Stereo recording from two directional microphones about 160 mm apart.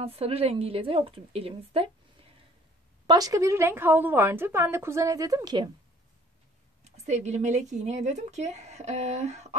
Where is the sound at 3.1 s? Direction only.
20° right (ahead or behind).